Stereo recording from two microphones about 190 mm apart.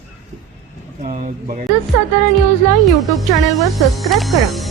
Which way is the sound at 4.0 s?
Centre (ahead or behind).